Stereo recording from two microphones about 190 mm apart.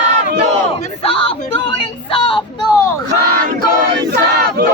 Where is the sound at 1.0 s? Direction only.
30° left (ahead or behind).